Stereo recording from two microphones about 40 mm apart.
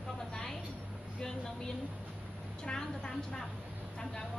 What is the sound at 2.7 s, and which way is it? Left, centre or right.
Vehicle, centre.